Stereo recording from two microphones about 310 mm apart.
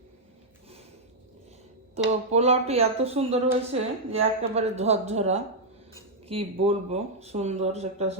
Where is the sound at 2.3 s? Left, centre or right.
Centre.